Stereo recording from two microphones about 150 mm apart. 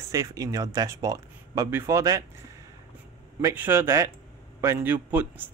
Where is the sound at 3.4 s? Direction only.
15° right (ahead or behind).